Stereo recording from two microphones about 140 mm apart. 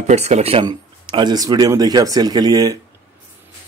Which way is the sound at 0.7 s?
30° right (ahead or behind).